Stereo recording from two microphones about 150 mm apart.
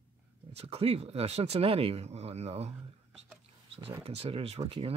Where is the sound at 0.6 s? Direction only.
40° right (ahead or behind).